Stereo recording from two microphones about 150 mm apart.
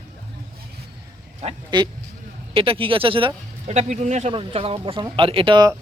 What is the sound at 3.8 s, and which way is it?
Speech, 50° right (ahead or behind).